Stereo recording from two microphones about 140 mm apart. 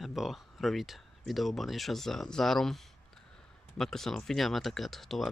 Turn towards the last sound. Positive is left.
turn(degrees=0)  # may be behind; listen again after turning